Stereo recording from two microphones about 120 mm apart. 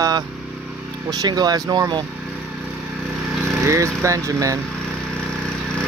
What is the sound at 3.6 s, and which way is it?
Speech, 25° right (ahead or behind).